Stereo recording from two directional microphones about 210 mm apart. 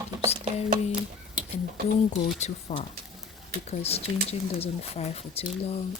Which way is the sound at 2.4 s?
30° left (ahead or behind).